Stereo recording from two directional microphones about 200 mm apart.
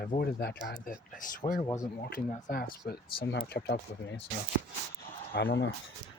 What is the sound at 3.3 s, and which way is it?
Speech, 60° left (ahead or behind).